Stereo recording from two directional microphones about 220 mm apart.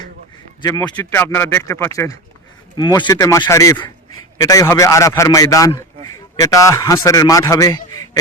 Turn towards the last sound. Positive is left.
turn(degrees=15)  # may be behind; listen again after turning